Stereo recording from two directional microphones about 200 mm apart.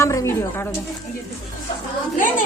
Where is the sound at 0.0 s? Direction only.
15° left (ahead or behind).